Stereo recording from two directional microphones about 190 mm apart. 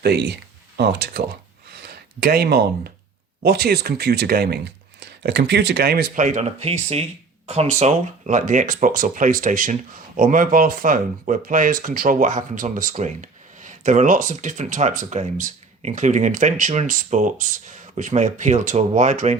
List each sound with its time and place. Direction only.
0.0 s speech: 60° right (ahead or behind)
1.7 s a sound: 60° right (ahead or behind)
3.4 s speech: 60° right (ahead or behind); by 19.4 s 40° right (ahead or behind)